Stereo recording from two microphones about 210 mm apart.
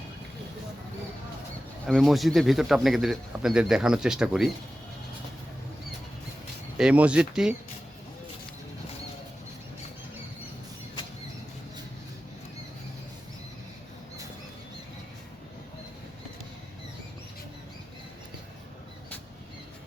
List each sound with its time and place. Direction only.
1.9 s speech: centre (ahead or behind)
6.7 s speech: 5° right (ahead or behind)